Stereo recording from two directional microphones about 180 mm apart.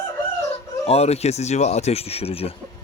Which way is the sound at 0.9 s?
35° left (ahead or behind).